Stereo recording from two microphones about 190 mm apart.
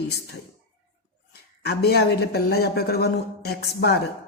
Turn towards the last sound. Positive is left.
turn(degrees=55)  # may be behind; listen again after turning